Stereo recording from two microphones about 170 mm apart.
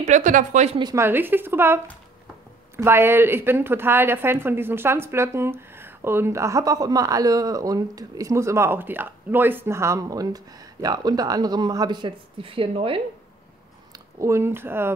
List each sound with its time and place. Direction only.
0.0 s a woman's voice: 45° right (ahead or behind)
0.7 s speech: 25° right (ahead or behind)
1.0 s a woman's voice: 10° right (ahead or behind)
2.8 s a woman's voice: 15° right (ahead or behind); by 13.0 s 30° right (ahead or behind)
14.2 s a woman's voice: 15° right (ahead or behind)